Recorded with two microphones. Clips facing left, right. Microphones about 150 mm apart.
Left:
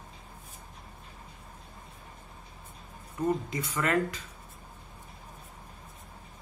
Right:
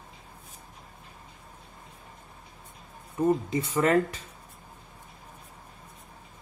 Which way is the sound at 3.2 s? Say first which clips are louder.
Right 5 dB; 25° right (ahead or behind).